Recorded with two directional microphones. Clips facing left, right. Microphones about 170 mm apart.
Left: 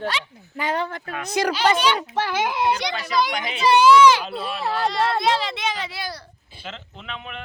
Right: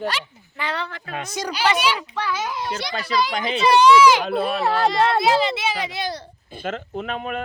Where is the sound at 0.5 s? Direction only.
45° left (ahead or behind).